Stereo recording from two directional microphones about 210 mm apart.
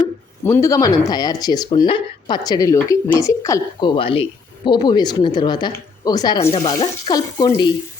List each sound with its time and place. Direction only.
0.4 s speech: 15° left (ahead or behind)